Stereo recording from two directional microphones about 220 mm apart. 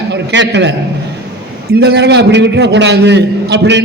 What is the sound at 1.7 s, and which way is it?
A man's voice, 50° right (ahead or behind).